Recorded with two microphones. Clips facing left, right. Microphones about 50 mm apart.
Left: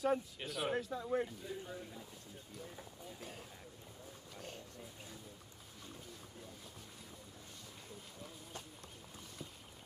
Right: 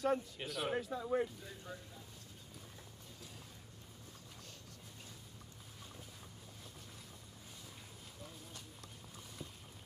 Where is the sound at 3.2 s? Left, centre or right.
Left.